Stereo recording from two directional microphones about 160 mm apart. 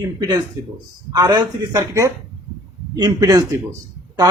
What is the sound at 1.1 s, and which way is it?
Speech, 25° right (ahead or behind).